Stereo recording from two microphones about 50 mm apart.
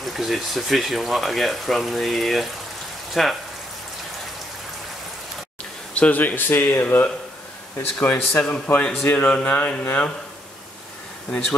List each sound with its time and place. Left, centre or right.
0.0 s speech: centre
5.9 s speech: left
8.6 s a man's voice: left